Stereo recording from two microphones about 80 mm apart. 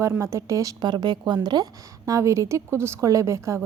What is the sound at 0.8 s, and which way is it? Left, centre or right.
A woman's voice, right.